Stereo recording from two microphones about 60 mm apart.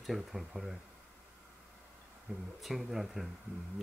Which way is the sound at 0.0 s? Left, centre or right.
Centre.